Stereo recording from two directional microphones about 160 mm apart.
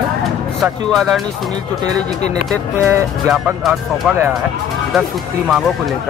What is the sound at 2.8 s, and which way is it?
Speech, 15° right (ahead or behind).